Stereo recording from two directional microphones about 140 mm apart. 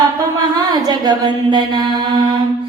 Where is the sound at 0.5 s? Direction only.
30° right (ahead or behind).